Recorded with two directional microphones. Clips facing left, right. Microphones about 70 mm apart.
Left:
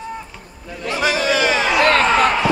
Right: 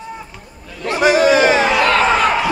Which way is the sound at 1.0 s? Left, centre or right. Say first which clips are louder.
Right 6 dB; right.